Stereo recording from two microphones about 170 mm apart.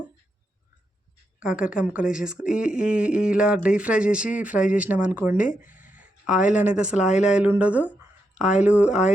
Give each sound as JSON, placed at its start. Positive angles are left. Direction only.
{"t": 1.4, "sound": "speech", "side_deg": -5}
{"t": 5.7, "sound": "a sound", "side_deg": 50}
{"t": 6.0, "sound": "speech", "side_deg": -5}